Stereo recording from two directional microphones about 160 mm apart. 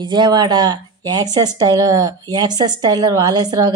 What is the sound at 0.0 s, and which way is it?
A woman's voice, 25° right (ahead or behind).